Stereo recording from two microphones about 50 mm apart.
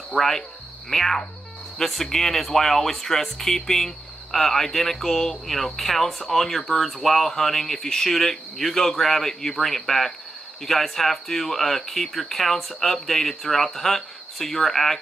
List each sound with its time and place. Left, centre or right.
0.1 s cricket: centre
0.8 s speech: centre